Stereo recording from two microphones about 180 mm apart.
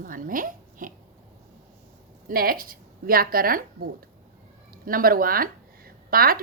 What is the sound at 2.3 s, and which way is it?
A woman's voice, 55° right (ahead or behind).